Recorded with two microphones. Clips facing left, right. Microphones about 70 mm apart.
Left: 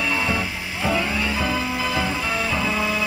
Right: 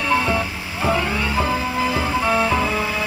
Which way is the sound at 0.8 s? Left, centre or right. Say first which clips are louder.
Right 2 dB; right.